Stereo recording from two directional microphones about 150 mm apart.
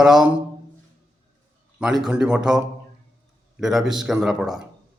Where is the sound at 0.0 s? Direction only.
5° right (ahead or behind).